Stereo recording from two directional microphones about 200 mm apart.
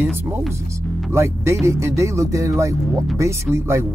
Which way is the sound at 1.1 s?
15° right (ahead or behind).